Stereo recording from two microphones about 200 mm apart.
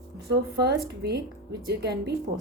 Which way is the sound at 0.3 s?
55° right (ahead or behind).